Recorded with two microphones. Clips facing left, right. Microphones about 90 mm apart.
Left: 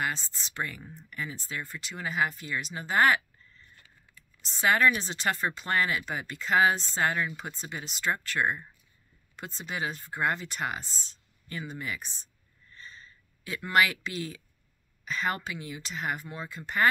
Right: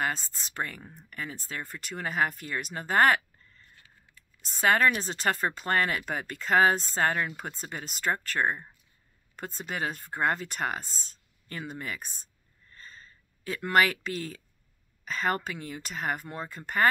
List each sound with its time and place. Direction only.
0.0 s speech: 45° right (ahead or behind)
4.4 s speech: 45° right (ahead or behind)
12.7 s a sound: 40° right (ahead or behind)
15.0 s speech: 45° right (ahead or behind)